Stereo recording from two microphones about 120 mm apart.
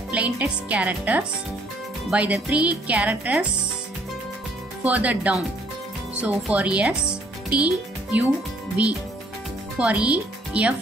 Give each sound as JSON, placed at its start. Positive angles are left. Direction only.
{"t": 0.1, "sound": "speech", "side_deg": -10}
{"t": 4.8, "sound": "speech", "side_deg": -10}
{"t": 6.5, "sound": "speech", "side_deg": -10}